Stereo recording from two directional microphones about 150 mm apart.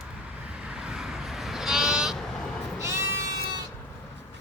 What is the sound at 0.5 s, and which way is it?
Sheep, 5° right (ahead or behind).